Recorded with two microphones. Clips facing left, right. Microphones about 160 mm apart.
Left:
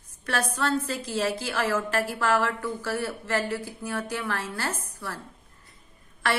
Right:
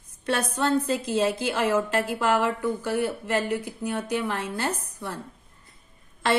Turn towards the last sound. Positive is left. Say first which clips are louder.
# right 4 dB
turn(degrees=-20)  # may be behind; listen again after turning